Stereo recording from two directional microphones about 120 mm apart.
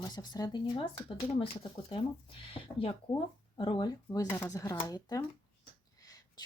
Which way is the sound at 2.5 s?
45° left (ahead or behind).